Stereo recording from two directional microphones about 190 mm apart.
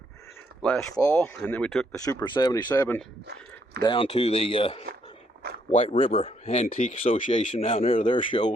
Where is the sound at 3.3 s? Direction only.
60° right (ahead or behind).